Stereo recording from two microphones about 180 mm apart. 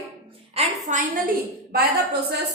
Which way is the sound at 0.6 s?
35° right (ahead or behind).